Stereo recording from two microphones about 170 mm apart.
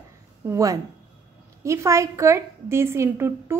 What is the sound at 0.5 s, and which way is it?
A woman's voice, 20° right (ahead or behind).